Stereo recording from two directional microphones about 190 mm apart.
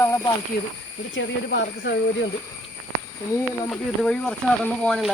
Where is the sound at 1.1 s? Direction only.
65° left (ahead or behind).